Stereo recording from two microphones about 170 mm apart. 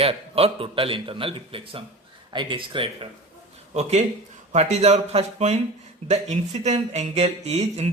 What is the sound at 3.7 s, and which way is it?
A man's voice, 40° right (ahead or behind).